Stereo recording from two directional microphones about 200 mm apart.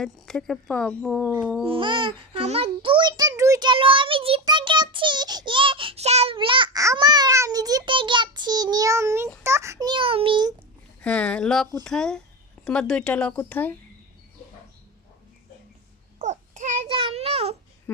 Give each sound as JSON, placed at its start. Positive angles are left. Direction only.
{"t": 0.0, "sound": "speech", "side_deg": 5}
{"t": 1.6, "sound": "babbling", "side_deg": -25}
{"t": 9.4, "sound": "a sound", "side_deg": -15}
{"t": 11.0, "sound": "speech", "side_deg": 5}
{"t": 16.1, "sound": "babbling", "side_deg": -35}
{"t": 17.9, "sound": "speech", "side_deg": 10}